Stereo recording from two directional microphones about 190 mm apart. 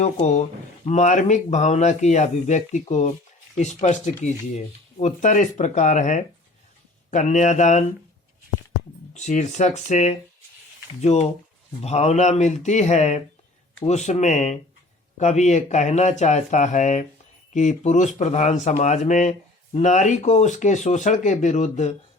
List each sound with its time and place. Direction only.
0.0 s speech: 35° left (ahead or behind)
9.1 s speech: 40° left (ahead or behind)